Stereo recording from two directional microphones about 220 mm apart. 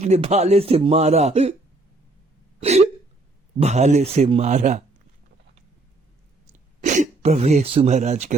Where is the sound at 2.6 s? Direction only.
30° right (ahead or behind).